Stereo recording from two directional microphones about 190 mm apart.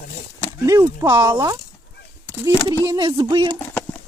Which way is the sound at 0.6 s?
20° right (ahead or behind).